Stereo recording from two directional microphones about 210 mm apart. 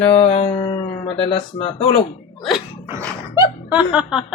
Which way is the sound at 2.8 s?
15° right (ahead or behind).